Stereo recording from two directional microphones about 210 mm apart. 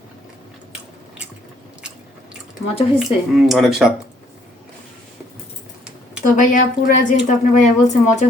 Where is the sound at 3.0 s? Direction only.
Centre (ahead or behind).